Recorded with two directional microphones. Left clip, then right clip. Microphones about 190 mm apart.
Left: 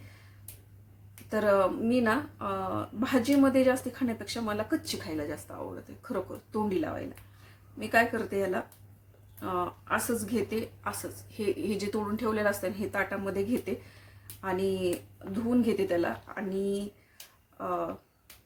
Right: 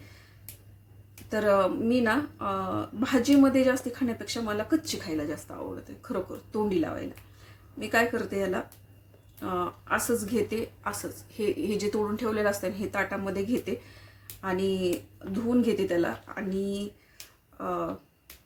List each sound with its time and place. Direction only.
1.3 s speech: 5° left (ahead or behind)
17.6 s speech: 5° left (ahead or behind)